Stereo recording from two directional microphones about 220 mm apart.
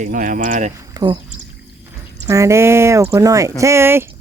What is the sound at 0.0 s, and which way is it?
Speech, 35° right (ahead or behind).